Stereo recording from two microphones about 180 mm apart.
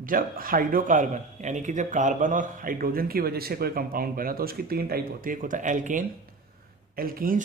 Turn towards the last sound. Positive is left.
turn(degrees=-55)  # may be behind; listen again after turning